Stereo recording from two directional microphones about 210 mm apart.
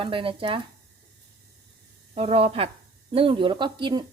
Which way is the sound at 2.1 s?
30° right (ahead or behind).